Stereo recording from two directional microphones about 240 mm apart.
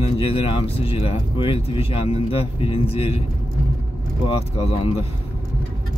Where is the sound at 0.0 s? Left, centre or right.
Left.